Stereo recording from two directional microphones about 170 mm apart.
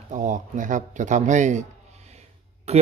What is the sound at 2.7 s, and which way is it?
Speech, 40° right (ahead or behind).